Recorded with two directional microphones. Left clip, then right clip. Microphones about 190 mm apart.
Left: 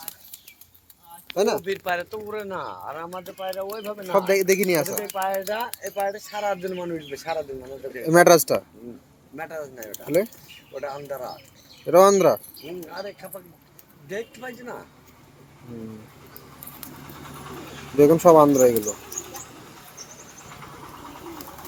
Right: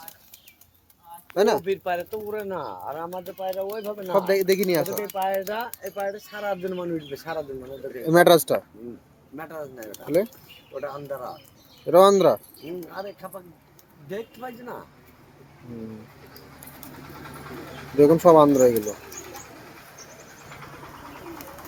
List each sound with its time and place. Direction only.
1.4 s speech: 10° right (ahead or behind)
1.6 s speech: 35° right (ahead or behind)
4.0 s speech: centre (ahead or behind)
5.1 s speech: 45° right (ahead or behind); by 7.4 s 60° right (ahead or behind)
8.0 s speech: centre (ahead or behind)
9.3 s speech: 60° right (ahead or behind)
11.9 s speech: centre (ahead or behind)
12.9 s speech: 60° right (ahead or behind)
17.2 s vehicle: 60° left (ahead or behind)
17.9 s speech: centre (ahead or behind)
19.2 s bird: 50° left (ahead or behind)
19.6 s bird: 65° left (ahead or behind)